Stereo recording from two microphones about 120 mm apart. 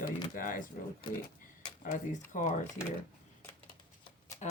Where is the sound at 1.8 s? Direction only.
90° left.